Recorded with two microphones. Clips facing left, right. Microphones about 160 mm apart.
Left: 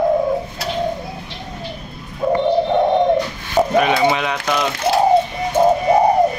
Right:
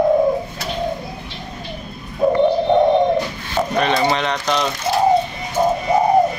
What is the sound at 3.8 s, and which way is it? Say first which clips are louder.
Speech: even; 5° left (ahead or behind).